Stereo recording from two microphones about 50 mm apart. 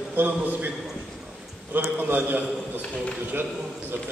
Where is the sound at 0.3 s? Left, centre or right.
Right.